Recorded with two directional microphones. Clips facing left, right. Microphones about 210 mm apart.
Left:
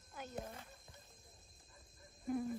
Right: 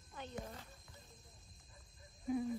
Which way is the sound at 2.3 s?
Centre (ahead or behind).